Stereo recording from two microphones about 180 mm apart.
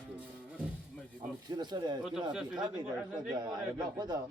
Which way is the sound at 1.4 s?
25° right (ahead or behind).